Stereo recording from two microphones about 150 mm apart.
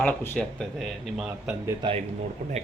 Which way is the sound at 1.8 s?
30° right (ahead or behind).